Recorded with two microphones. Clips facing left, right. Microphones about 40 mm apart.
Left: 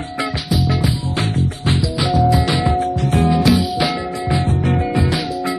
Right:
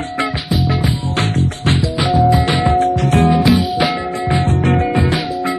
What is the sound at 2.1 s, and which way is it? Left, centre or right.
Music, centre.